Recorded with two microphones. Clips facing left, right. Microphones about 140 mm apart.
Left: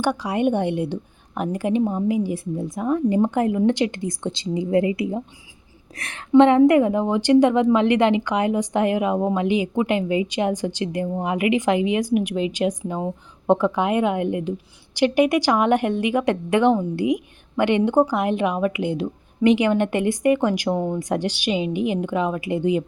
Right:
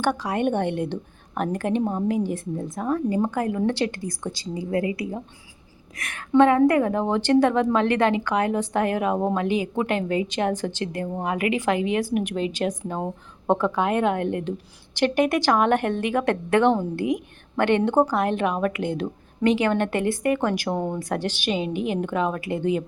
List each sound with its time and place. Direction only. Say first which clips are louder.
0.0 s a woman's voice: left 2 dB; 10° left (ahead or behind)
1.8 s speech: left 3 dB; centre (ahead or behind)
2.2 s a woman's voice: left 2 dB; 10° left (ahead or behind)
12.8 s speech: left 2 dB; centre (ahead or behind)
13.5 s a woman's voice: left 3 dB; 15° left (ahead or behind)